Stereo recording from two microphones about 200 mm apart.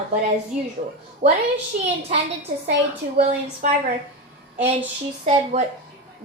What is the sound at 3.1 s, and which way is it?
Speech, 40° right (ahead or behind).